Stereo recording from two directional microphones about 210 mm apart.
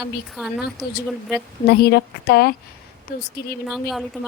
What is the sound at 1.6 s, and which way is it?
Speech, 50° left (ahead or behind).